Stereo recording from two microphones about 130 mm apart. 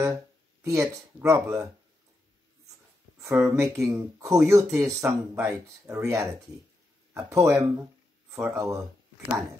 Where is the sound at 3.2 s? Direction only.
20° right (ahead or behind).